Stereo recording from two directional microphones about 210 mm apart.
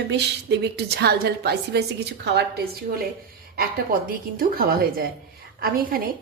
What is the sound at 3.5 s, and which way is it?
A woman's voice, 45° right (ahead or behind).